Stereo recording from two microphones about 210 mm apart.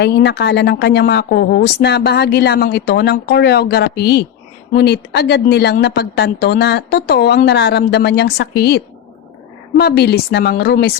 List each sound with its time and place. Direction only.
0.0 s speech: 55° left (ahead or behind)